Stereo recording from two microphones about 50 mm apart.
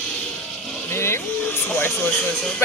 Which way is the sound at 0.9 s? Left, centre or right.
Left.